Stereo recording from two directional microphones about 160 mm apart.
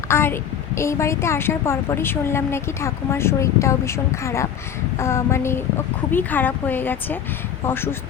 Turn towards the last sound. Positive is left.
turn(degrees=15)  # may be behind; listen again after turning